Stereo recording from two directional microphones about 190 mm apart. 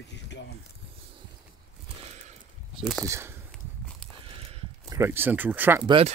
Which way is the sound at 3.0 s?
15° right (ahead or behind).